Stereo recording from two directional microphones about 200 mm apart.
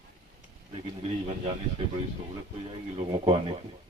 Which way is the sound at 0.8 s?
30° right (ahead or behind).